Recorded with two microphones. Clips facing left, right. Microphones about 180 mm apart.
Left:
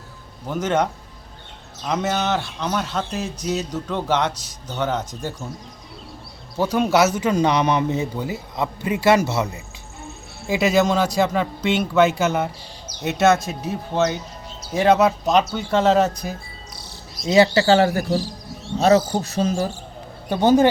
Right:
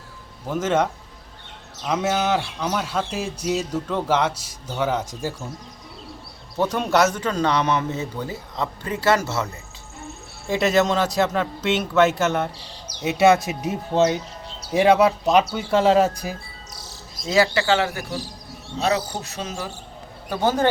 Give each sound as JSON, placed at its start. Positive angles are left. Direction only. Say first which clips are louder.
{"t": 0.4, "sound": "a man's voice", "louder": "even", "side_deg": 0}
{"t": 6.6, "sound": "a man's voice", "louder": "left 2 dB", "side_deg": 0}
{"t": 10.0, "sound": "speech", "louder": "even", "side_deg": 0}
{"t": 13.1, "sound": "a man's voice", "louder": "right 1 dB", "side_deg": -10}
{"t": 14.8, "sound": "a man's voice", "louder": "even", "side_deg": -5}
{"t": 17.2, "sound": "speech", "louder": "left 4 dB", "side_deg": 25}
{"t": 20.3, "sound": "speech", "louder": "left 6 dB", "side_deg": 20}